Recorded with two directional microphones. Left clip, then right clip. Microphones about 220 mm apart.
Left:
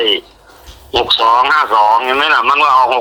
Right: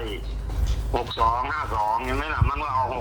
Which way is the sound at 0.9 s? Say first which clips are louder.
Left 13 dB; 40° left (ahead or behind).